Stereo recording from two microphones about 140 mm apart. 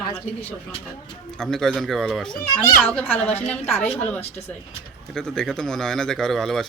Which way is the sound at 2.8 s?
15° left (ahead or behind).